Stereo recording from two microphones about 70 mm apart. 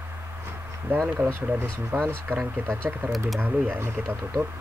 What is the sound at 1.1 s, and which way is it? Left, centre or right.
Speech, right.